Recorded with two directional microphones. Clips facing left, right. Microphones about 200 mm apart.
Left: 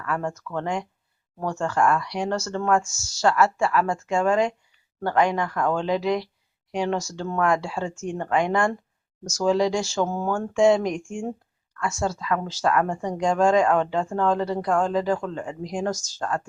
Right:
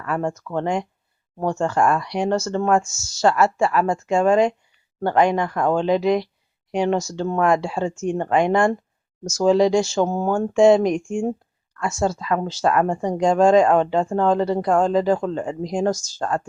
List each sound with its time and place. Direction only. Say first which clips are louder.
0.0 s speech: right 4 dB; 25° right (ahead or behind)